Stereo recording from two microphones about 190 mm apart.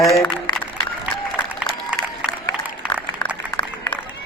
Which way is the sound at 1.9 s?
5° right (ahead or behind).